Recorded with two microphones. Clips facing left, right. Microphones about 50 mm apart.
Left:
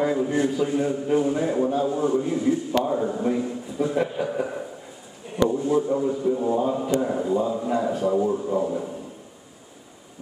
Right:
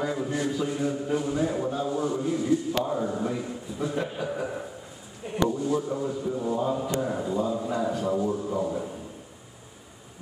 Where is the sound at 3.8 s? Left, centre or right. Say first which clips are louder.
Left 5 dB; centre.